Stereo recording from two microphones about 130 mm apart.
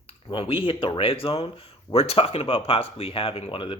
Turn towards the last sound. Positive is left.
turn(degrees=40)  # may be behind; listen again after turning